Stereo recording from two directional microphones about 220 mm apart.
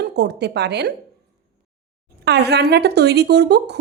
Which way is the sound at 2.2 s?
50° right (ahead or behind).